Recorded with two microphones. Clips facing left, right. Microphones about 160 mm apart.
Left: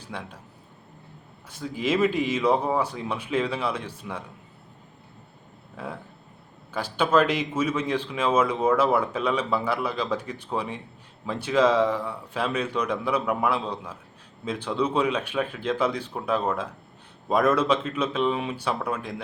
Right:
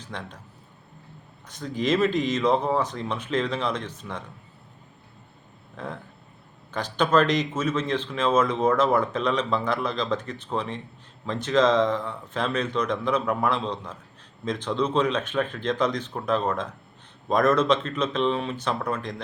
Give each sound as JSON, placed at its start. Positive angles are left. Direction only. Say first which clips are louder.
{"t": 0.0, "sound": "a man's voice", "louder": "even", "side_deg": 10}
{"t": 1.5, "sound": "speech", "louder": "right 2 dB", "side_deg": 10}
{"t": 5.7, "sound": "speech", "louder": "even", "side_deg": 10}